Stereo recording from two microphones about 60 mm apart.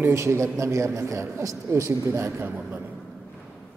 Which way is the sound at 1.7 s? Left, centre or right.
Right.